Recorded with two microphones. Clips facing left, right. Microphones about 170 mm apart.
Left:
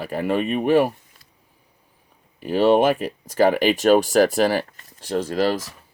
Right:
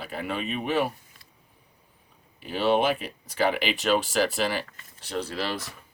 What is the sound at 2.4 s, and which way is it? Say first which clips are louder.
Speech: left 7 dB; 45° left (ahead or behind).